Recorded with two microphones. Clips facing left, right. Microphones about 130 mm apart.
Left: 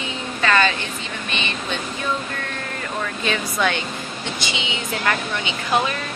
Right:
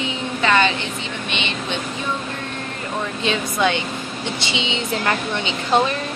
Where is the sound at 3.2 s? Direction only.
20° right (ahead or behind).